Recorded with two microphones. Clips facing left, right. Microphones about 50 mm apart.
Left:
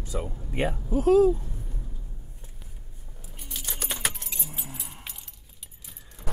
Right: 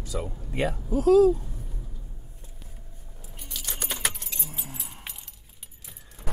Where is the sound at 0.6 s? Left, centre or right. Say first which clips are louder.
Even; left.